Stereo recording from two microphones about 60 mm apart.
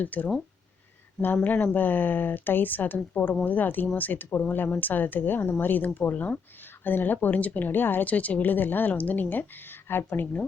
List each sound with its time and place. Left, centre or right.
0.0 s a woman's voice: left